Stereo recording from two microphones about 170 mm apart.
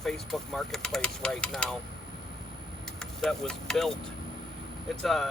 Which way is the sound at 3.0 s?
Centre (ahead or behind).